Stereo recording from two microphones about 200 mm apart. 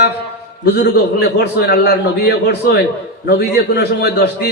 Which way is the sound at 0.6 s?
55° left (ahead or behind).